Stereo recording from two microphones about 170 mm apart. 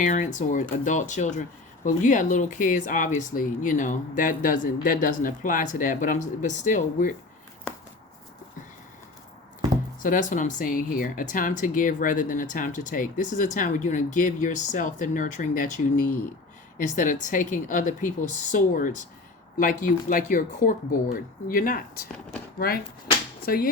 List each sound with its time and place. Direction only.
0.0 s speech: 45° left (ahead or behind)
7.7 s a sound: 5° left (ahead or behind)
10.0 s speech: 50° left (ahead or behind)